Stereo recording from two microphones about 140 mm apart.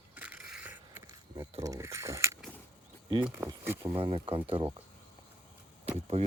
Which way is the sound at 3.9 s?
35° right (ahead or behind).